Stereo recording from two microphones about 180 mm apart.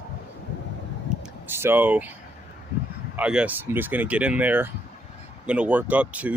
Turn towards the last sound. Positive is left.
turn(degrees=-10)  # may be behind; listen again after turning